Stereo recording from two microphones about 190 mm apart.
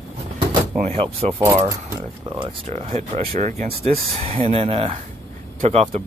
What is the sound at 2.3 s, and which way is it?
Speech, 30° right (ahead or behind).